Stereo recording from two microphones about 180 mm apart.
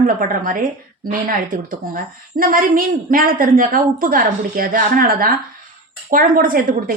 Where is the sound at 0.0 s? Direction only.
50° right (ahead or behind).